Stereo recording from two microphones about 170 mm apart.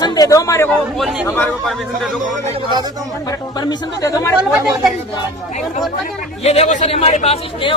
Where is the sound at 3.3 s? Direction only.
20° left (ahead or behind).